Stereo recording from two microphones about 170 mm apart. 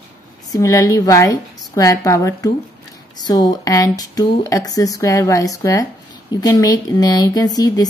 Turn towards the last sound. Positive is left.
turn(degrees=20)  # may be behind; listen again after turning